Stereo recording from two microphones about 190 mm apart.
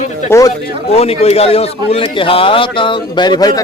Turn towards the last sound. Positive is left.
turn(degrees=20)  # may be behind; listen again after turning